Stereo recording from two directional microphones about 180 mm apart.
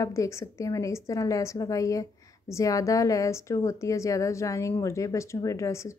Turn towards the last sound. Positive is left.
turn(degrees=15)  # may be behind; listen again after turning